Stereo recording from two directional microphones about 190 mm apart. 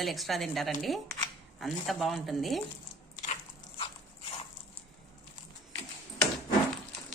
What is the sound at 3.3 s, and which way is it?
Biting, 30° left (ahead or behind).